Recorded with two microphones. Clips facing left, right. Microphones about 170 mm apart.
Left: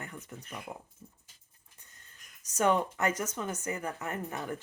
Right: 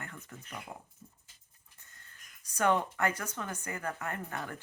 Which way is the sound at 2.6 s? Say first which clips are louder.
Left 1 dB; 20° left (ahead or behind).